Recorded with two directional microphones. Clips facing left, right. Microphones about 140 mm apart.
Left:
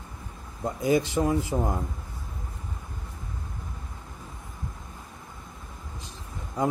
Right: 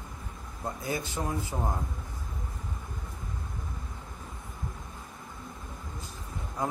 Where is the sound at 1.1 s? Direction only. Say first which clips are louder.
Left 8 dB; 90° left.